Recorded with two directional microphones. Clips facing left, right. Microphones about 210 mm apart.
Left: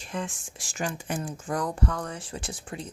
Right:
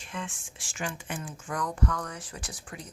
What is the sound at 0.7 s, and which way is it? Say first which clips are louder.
Speech: left 4 dB; 40° left (ahead or behind).